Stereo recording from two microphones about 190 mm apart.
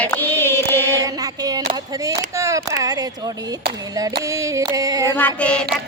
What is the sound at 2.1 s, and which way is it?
Speech, 15° right (ahead or behind).